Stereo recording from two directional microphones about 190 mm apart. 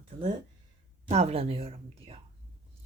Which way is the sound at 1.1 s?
35° right (ahead or behind).